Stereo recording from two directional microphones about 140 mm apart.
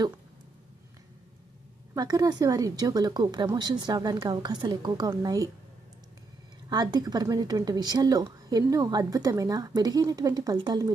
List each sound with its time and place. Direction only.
2.0 s a woman's voice: 25° right (ahead or behind)
6.7 s a woman's voice: 30° right (ahead or behind)